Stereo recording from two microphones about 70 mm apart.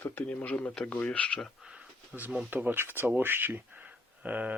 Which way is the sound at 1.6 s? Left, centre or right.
Centre.